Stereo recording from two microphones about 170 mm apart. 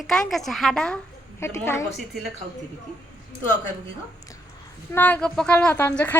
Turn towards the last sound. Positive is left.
turn(degrees=10)  # may be behind; listen again after turning